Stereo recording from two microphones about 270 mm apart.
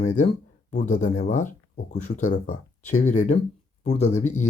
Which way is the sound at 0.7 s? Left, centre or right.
Left.